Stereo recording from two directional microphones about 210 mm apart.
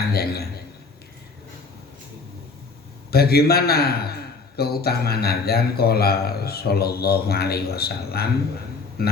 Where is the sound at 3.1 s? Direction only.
50° left (ahead or behind).